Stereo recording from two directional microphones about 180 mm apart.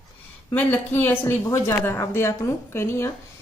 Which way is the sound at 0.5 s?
10° left (ahead or behind).